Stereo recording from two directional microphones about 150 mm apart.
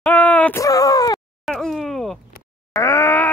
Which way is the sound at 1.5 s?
Centre (ahead or behind).